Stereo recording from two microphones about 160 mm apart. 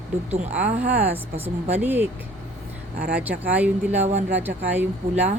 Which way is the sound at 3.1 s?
10° right (ahead or behind).